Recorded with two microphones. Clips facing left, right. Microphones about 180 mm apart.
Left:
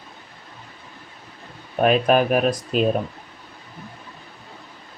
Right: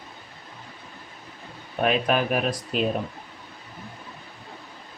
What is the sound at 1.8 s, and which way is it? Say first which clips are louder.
Speech: left 6 dB; 45° left (ahead or behind).